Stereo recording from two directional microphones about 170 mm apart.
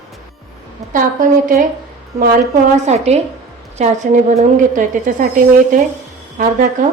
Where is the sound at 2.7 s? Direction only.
40° right (ahead or behind).